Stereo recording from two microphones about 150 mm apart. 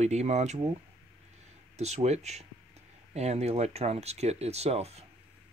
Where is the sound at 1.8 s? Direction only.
45° right (ahead or behind).